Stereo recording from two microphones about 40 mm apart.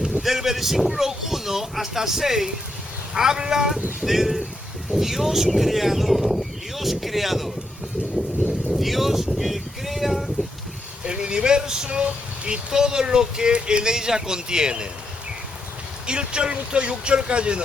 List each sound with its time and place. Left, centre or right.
0.2 s speech: centre
4.0 s speech: centre
8.7 s speech: centre
11.0 s speech: right
16.0 s speech: right